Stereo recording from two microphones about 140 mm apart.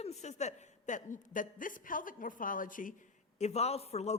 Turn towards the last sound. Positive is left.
turn(degrees=50)  # may be behind; listen again after turning